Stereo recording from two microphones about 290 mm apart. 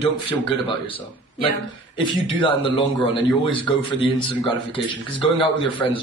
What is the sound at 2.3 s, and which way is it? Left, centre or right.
A man's voice, centre.